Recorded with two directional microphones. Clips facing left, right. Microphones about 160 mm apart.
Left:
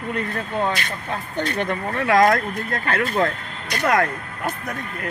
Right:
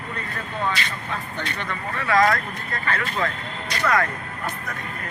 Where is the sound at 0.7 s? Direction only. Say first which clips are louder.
Left 2 dB; 50° left (ahead or behind).